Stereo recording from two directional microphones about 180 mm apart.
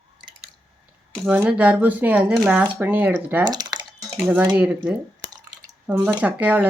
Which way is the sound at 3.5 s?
25° right (ahead or behind).